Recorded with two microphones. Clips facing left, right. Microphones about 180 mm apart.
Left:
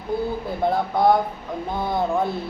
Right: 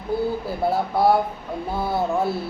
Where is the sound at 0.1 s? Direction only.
5° right (ahead or behind).